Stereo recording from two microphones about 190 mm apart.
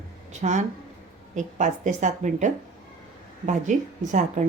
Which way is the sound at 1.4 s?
40° right (ahead or behind).